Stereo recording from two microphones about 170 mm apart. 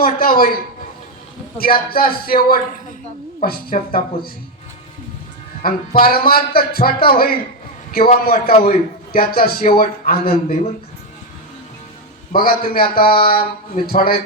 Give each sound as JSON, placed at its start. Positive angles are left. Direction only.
{"t": 0.0, "sound": "a man's voice", "side_deg": 60}
{"t": 5.6, "sound": "a man's voice", "side_deg": 60}
{"t": 12.3, "sound": "a man's voice", "side_deg": 60}